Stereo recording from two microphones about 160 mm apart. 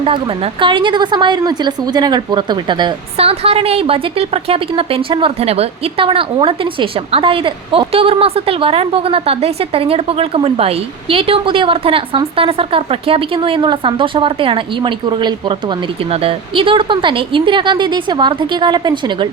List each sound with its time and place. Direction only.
0.0 s a woman's voice: 35° right (ahead or behind)
16.0 s a woman's voice: 35° right (ahead or behind)